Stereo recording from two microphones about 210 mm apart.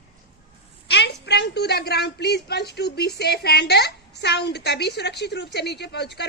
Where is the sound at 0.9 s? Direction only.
55° left (ahead or behind).